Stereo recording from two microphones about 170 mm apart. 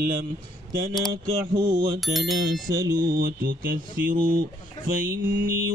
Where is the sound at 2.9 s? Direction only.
60° right (ahead or behind).